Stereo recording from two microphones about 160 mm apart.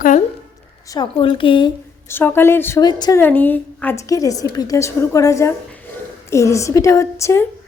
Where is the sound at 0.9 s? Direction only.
30° left (ahead or behind).